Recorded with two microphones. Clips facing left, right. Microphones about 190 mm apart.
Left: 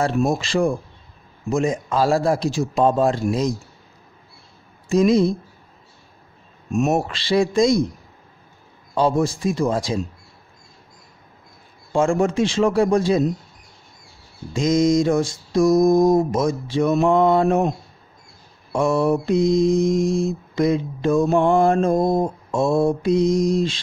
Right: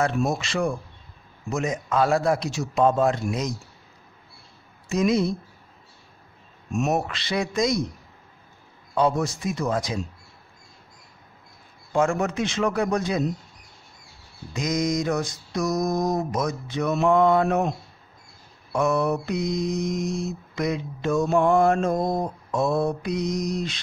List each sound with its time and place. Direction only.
0.3 s speech: 30° left (ahead or behind)
4.8 s speech: 30° left (ahead or behind)
6.7 s speech: 40° left (ahead or behind)
7.1 s mantra: 30° left (ahead or behind)
8.9 s mantra: 30° left (ahead or behind)
11.9 s mantra: 30° left (ahead or behind)
14.5 s mantra: 25° left (ahead or behind)